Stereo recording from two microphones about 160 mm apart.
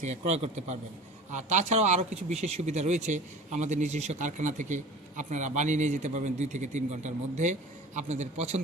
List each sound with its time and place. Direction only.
0.0 s a man's voice: 45° right (ahead or behind)